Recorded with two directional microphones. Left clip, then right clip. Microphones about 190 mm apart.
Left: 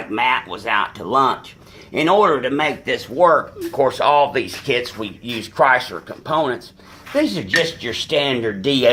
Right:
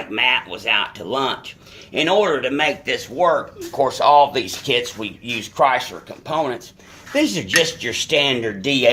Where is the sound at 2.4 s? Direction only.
30° left (ahead or behind).